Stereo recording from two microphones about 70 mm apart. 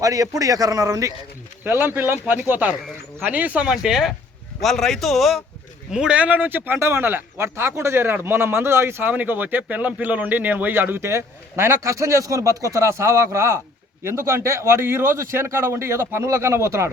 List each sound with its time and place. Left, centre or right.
0.0 s a man's voice: right
1.6 s speech: right
3.7 s speech: centre
4.6 s a man's voice: centre
5.9 s speech: centre
6.7 s speech: right